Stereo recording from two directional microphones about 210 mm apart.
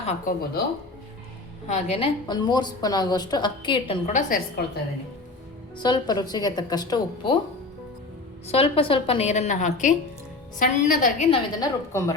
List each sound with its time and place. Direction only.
0.0 s a woman's voice: 35° left (ahead or behind)
1.6 s a woman's voice: 30° left (ahead or behind)
5.7 s a woman's voice: 20° left (ahead or behind)
8.4 s a woman's voice: 30° left (ahead or behind)
11.3 s a woman's voice: 15° left (ahead or behind)